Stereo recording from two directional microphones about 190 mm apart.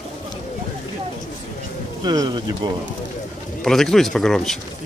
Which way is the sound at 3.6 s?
Centre (ahead or behind).